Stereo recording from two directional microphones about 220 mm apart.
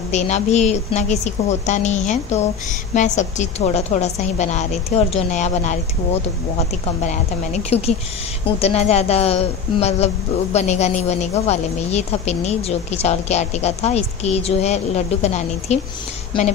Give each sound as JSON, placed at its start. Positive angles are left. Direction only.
{"t": 0.1, "sound": "a woman's voice", "side_deg": 30}